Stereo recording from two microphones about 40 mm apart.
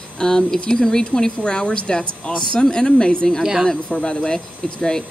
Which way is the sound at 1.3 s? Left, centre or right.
Left.